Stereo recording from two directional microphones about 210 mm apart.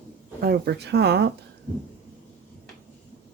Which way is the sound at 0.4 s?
50° right (ahead or behind).